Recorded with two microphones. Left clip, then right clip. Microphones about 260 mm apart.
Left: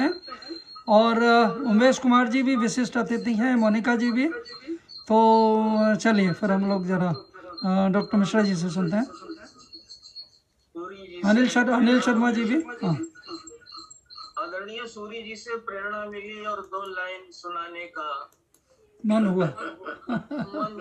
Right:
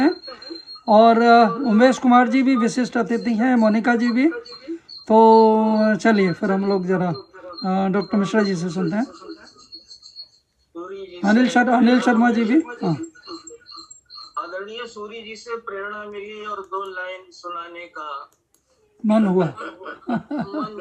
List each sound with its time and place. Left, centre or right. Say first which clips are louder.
0.9 s speech: right 6 dB; centre
11.0 s speech: right 4 dB; centre
19.0 s a man's voice: right 5 dB; centre